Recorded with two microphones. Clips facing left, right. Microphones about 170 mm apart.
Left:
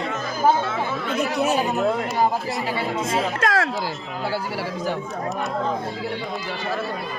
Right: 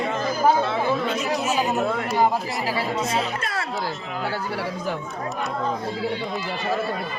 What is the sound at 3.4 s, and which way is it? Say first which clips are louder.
Music: left 8 dB; 90° left.